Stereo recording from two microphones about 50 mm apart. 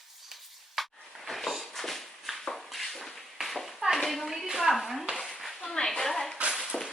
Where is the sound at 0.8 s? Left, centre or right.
Centre.